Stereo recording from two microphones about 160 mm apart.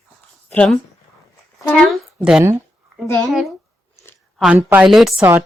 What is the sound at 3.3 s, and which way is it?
Speech, centre (ahead or behind).